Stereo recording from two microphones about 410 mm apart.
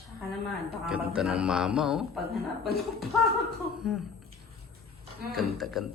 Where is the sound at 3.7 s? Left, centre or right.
Centre.